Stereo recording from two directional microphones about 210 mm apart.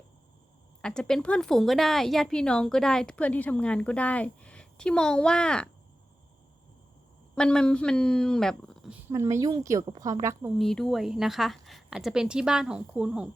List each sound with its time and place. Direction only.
0.8 s a woman's voice: 5° left (ahead or behind)
7.3 s a woman's voice: 5° left (ahead or behind)
9.0 s a woman's voice: 15° right (ahead or behind)
10.6 s a woman's voice: centre (ahead or behind)